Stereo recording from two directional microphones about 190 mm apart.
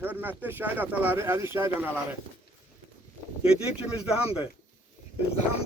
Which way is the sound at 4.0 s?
5° right (ahead or behind).